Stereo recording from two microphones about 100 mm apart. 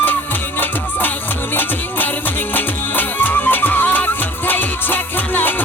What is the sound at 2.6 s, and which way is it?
Music, 20° left (ahead or behind).